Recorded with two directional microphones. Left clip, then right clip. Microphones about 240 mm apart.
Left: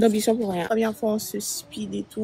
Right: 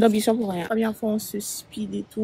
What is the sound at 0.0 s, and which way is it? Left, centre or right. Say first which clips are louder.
Speech: right 1 dB; right.